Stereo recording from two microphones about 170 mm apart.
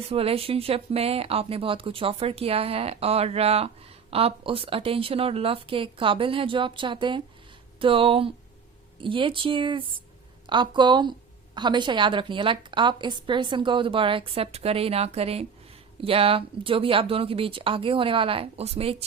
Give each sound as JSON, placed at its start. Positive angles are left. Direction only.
{"t": 0.1, "sound": "a woman's voice", "side_deg": -35}